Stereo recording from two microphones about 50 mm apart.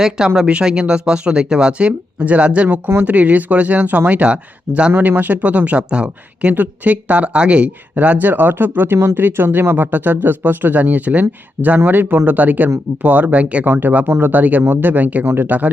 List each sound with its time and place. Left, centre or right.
0.4 s speech: centre
2.6 s speech: right
4.9 s speech: right
6.5 s speech: right
13.7 s speech: right
14.3 s speech: right